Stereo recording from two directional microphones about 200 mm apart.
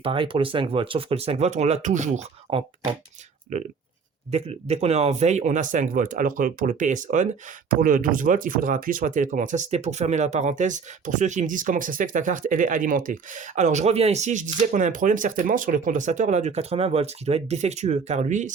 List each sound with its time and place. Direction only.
0.0 s speech: 25° right (ahead or behind)